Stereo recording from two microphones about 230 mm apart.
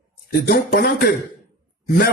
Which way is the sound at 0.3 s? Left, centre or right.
Left.